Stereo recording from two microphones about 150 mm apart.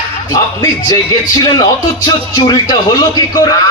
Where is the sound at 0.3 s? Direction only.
25° left (ahead or behind).